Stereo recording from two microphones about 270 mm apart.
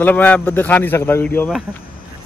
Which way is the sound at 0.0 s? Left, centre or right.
Centre.